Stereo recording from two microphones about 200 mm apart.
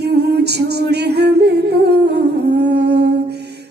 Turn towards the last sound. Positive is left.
turn(degrees=-55)  # may be behind; listen again after turning